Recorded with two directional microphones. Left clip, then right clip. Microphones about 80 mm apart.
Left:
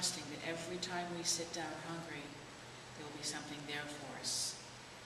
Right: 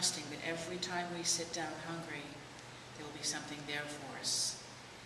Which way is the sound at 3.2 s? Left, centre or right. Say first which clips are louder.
Right 4 dB; centre.